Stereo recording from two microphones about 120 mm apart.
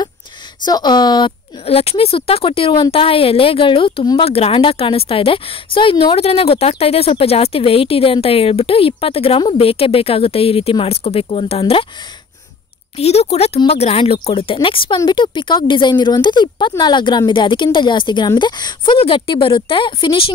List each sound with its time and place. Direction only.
0.7 s speech: 35° left (ahead or behind)
1.7 s a woman's voice: 55° left (ahead or behind)
12.9 s a woman's voice: 60° left (ahead or behind); by 20.3 s 45° left (ahead or behind)